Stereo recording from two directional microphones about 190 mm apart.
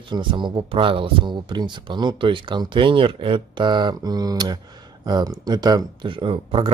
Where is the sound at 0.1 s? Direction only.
25° right (ahead or behind).